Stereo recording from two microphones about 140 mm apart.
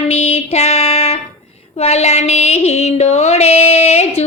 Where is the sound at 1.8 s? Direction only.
50° left (ahead or behind).